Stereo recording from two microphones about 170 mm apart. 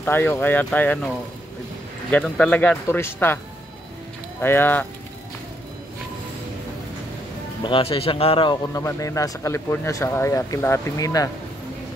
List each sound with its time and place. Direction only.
0.0 s speech: 10° left (ahead or behind)
4.4 s speech: 10° left (ahead or behind)
7.6 s speech: 30° left (ahead or behind)
8.7 s speech: 20° left (ahead or behind)